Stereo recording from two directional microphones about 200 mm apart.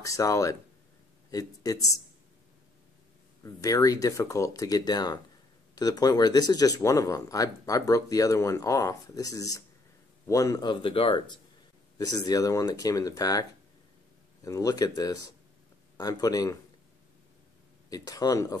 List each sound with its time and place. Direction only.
0.0 s speech: 15° left (ahead or behind)
3.4 s speech: 15° left (ahead or behind)
17.8 s speech: 20° left (ahead or behind)